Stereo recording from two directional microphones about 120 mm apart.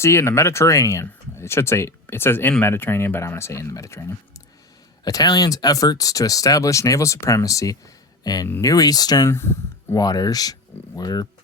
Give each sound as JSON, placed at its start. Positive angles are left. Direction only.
{"t": 0.0, "sound": "speech", "side_deg": 20}
{"t": 9.3, "sound": "speech", "side_deg": 20}
{"t": 10.0, "sound": "speech", "side_deg": 30}